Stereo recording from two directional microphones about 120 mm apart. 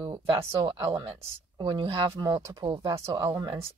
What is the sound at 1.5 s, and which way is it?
Speech, 40° right (ahead or behind).